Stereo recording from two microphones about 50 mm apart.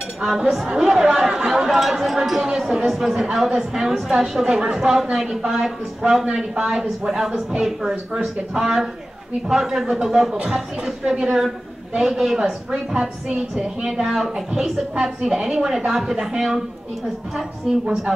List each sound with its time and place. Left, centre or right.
0.2 s speech: centre
17.8 s speech: centre